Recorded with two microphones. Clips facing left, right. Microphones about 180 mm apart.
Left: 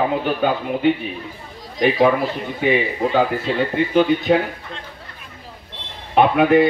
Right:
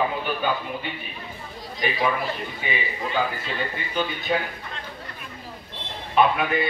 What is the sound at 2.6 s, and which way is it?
A man's voice, 70° left (ahead or behind).